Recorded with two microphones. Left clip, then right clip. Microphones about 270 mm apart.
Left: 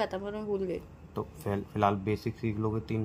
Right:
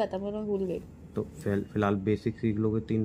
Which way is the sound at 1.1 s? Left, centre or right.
Centre.